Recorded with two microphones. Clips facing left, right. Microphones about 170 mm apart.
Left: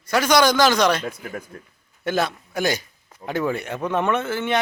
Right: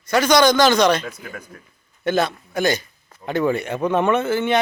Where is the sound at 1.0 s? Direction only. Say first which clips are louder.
Left 3 dB; 30° left (ahead or behind).